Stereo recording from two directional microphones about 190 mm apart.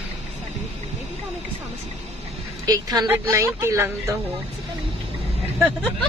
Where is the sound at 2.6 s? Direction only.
20° right (ahead or behind).